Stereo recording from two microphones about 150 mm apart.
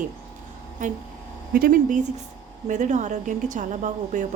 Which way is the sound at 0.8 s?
55° right (ahead or behind).